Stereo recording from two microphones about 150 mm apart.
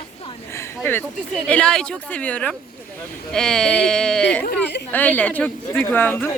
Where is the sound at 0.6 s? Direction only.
15° left (ahead or behind).